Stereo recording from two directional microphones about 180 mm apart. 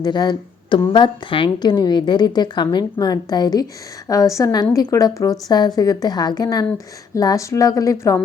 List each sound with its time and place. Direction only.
0.0 s a woman's voice: 25° left (ahead or behind)